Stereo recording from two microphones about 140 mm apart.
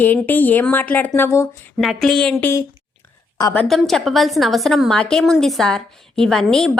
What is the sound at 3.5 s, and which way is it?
A woman's voice, 5° left (ahead or behind).